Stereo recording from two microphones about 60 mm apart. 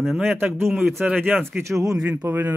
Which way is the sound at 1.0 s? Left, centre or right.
Right.